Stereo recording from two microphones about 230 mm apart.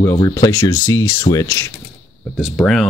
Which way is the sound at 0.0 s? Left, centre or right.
Centre.